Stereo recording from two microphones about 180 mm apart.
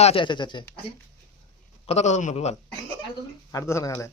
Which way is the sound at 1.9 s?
40° left (ahead or behind).